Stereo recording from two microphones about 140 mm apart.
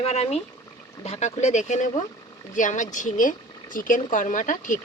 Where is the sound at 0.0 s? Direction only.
50° left (ahead or behind).